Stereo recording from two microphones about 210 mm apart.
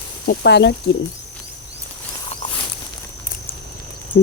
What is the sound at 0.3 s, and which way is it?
Speech, 55° left (ahead or behind).